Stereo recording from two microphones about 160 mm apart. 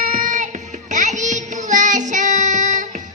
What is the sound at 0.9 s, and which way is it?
Child singing, 50° right (ahead or behind).